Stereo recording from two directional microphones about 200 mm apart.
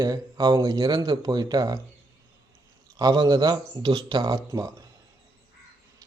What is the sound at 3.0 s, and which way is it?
Speech, 20° right (ahead or behind).